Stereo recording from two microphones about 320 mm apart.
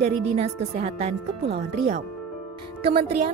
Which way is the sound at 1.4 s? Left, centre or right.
Right.